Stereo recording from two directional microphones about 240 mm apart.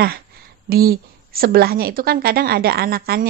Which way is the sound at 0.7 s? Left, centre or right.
Right.